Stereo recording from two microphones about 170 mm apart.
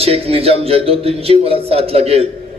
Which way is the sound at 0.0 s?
35° right (ahead or behind).